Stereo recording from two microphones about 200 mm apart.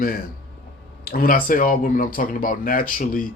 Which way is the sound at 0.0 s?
45° left (ahead or behind).